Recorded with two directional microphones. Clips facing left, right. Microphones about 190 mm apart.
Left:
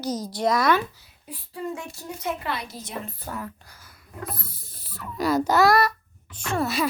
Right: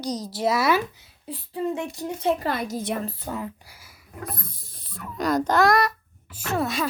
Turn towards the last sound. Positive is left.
turn(degrees=0)  # may be behind; listen again after turning